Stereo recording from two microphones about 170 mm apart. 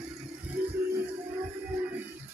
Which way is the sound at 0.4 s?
10° right (ahead or behind).